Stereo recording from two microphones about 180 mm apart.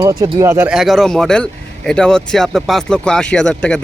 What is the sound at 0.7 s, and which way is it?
Speech, centre (ahead or behind).